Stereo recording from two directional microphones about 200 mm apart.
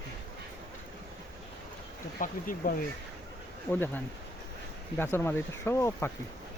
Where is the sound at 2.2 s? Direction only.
45° left (ahead or behind).